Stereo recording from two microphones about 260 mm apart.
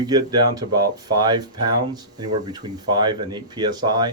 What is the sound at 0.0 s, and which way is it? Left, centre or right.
Speech, centre.